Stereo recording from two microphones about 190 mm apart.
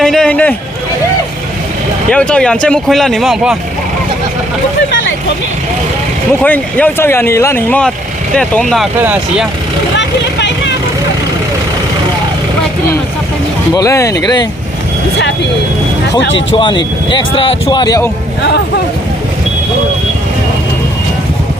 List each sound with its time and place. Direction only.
0.0 s a man's voice: 5° left (ahead or behind)
2.0 s speech: 5° left (ahead or behind)
6.4 s speech: 10° left (ahead or behind); by 9.5 s 10° right (ahead or behind)
13.7 s speech: 15° left (ahead or behind)
16.2 s speech: 80° left
16.6 s speech: 25° left (ahead or behind)